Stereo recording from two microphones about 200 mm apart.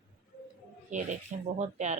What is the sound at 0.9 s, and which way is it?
Speech, 40° right (ahead or behind).